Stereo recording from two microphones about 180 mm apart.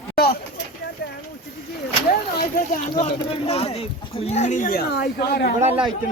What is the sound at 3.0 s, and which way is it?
Speech, 35° left (ahead or behind).